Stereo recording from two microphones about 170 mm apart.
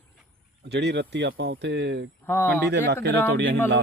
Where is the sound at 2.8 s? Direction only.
80° right.